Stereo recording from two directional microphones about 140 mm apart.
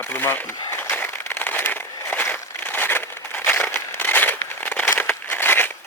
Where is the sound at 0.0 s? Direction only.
15° left (ahead or behind).